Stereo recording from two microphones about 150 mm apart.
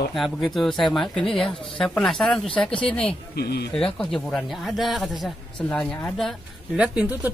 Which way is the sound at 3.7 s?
5° left (ahead or behind).